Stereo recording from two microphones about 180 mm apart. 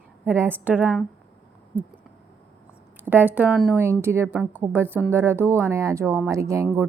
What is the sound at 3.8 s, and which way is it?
Speech, 15° right (ahead or behind).